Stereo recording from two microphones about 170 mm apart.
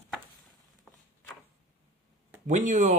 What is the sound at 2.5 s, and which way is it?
Speech, 45° right (ahead or behind).